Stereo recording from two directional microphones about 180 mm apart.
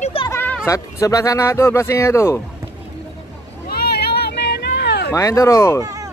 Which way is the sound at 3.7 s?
60° left (ahead or behind).